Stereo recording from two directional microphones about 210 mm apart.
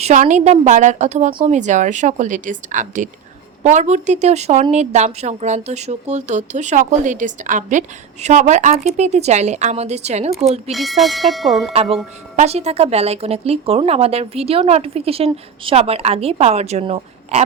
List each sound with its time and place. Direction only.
0.0 s a woman's voice: 35° right (ahead or behind)
10.7 s speech: centre (ahead or behind)
11.7 s a woman's voice: 30° right (ahead or behind)